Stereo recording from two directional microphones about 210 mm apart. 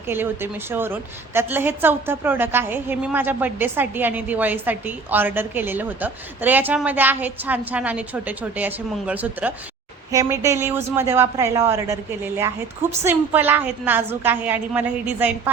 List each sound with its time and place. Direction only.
0.1 s a woman's voice: 10° right (ahead or behind)